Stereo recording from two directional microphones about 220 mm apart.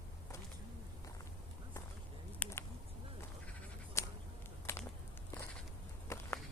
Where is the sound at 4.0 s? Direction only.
15° left (ahead or behind).